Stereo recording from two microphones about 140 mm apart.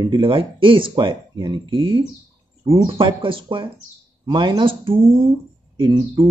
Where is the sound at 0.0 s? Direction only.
35° right (ahead or behind).